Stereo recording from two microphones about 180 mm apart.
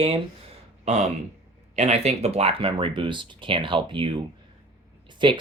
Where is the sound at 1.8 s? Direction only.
40° right (ahead or behind).